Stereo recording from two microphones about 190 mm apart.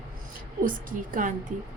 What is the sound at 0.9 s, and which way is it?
Speech, 45° right (ahead or behind).